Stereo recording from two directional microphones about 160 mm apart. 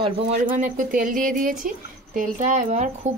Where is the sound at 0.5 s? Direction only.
55° right (ahead or behind).